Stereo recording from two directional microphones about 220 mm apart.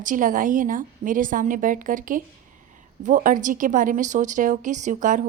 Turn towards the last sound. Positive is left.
turn(degrees=-35)  # may be behind; listen again after turning